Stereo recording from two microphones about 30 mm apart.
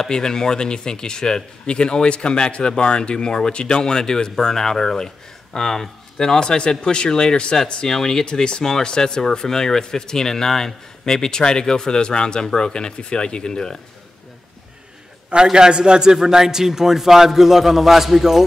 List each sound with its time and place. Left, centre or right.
0.1 s speech: left
7.8 s speech: centre
15.5 s a man's voice: right; by 18.4 s centre